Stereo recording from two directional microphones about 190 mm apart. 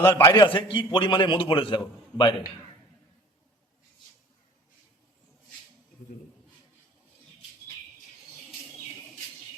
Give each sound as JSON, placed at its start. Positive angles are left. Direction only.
{"t": 0.0, "sound": "a man's voice", "side_deg": 15}